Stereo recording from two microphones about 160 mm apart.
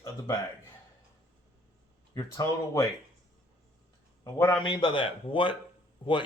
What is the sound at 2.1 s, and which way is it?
Speech, 20° left (ahead or behind).